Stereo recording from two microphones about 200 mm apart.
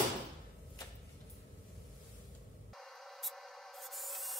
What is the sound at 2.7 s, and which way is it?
Spray, centre (ahead or behind).